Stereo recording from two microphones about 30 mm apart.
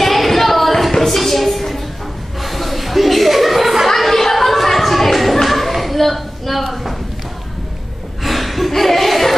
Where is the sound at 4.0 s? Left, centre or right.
Centre.